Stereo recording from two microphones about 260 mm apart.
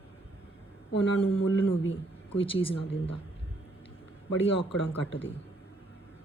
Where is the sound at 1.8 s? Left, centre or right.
Left.